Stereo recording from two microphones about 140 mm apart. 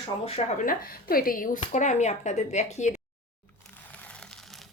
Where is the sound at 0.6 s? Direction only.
90° left.